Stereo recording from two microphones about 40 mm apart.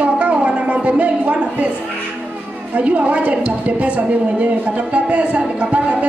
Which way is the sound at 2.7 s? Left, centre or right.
Right.